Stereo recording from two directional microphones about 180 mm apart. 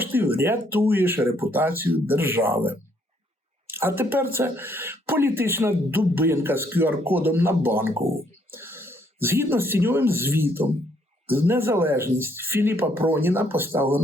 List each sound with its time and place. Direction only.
0.0 s speech: 10° right (ahead or behind)
3.7 s speech: 10° right (ahead or behind)